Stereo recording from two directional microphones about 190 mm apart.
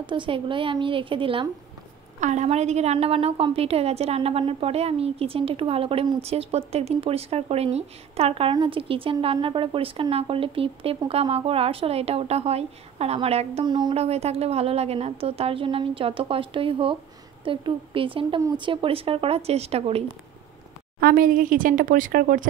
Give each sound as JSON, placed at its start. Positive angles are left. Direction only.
{"t": 0.0, "sound": "a woman's voice", "side_deg": -25}
{"t": 2.1, "sound": "a woman's voice", "side_deg": -40}
{"t": 21.0, "sound": "a woman's voice", "side_deg": -50}